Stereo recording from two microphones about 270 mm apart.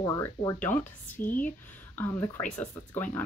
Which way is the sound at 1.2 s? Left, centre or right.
Left.